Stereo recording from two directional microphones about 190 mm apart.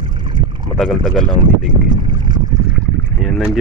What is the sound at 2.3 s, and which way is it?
Boat, 25° right (ahead or behind).